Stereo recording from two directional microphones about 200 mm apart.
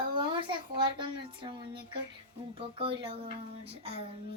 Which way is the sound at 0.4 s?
25° right (ahead or behind).